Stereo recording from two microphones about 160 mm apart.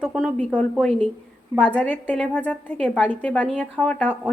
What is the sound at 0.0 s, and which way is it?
A woman's voice, centre (ahead or behind).